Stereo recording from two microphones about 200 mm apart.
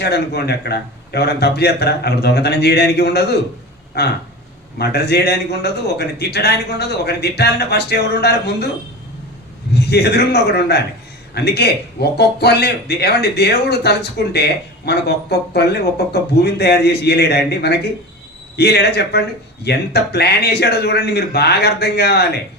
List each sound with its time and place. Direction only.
0.0 s a man's voice: 55° left (ahead or behind)
9.7 s a man's voice: 55° left (ahead or behind)